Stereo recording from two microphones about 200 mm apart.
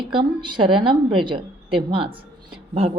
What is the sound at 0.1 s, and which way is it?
A woman's voice, 25° right (ahead or behind).